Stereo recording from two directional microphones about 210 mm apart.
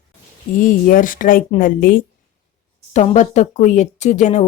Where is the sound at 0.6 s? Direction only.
40° left (ahead or behind).